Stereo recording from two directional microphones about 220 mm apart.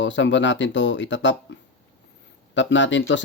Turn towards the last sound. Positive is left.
turn(degrees=55)  # may be behind; listen again after turning